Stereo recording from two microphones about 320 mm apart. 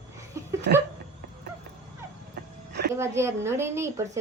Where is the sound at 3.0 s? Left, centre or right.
Centre.